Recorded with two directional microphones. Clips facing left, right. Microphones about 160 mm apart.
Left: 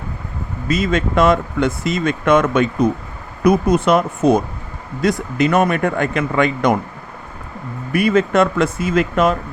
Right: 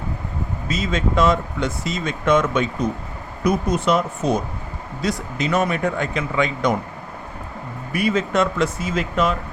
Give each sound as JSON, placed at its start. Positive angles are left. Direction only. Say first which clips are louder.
{"t": 0.7, "sound": "speech", "louder": "left 5 dB", "side_deg": 55}
{"t": 7.9, "sound": "speech", "louder": "left 5 dB", "side_deg": 55}